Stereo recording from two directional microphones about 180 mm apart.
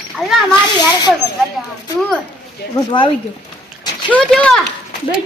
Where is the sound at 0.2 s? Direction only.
5° left (ahead or behind).